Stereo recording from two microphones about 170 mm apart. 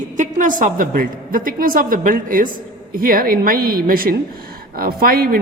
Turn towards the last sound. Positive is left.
turn(degrees=-60)  # may be behind; listen again after turning